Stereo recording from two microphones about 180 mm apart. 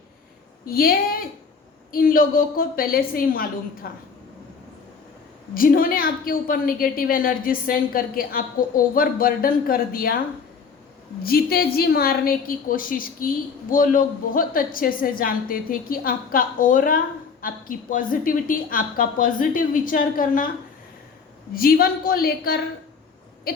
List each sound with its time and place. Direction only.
0.6 s a woman's voice: 55° left (ahead or behind)
5.5 s a woman's voice: 50° left (ahead or behind)
11.2 s a woman's voice: 60° left (ahead or behind)
21.5 s a woman's voice: 55° left (ahead or behind)